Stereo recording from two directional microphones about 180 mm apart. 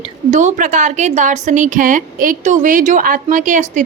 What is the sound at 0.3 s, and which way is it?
A woman's voice, 45° right (ahead or behind).